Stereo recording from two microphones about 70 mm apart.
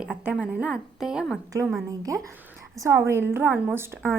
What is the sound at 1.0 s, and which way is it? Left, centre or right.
Speech, centre.